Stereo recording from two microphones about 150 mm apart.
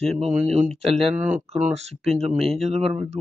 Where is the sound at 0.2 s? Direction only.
50° right (ahead or behind).